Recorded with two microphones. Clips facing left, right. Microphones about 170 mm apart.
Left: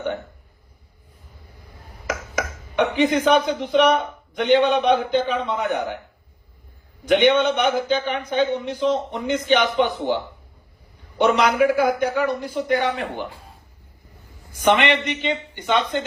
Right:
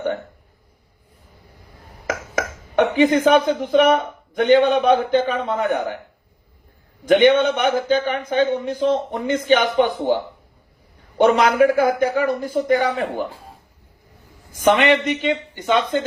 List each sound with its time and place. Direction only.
2.0 s a sound: 50° right (ahead or behind)
3.2 s speech: 50° right (ahead or behind)
7.1 s speech: 50° right (ahead or behind)
11.2 s speech: 50° right (ahead or behind)
14.6 s speech: 45° right (ahead or behind)